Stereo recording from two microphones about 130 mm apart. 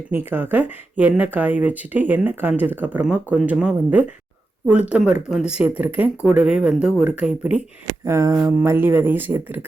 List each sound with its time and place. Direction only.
0.1 s speech: 15° right (ahead or behind)
8.0 s speech: 25° right (ahead or behind)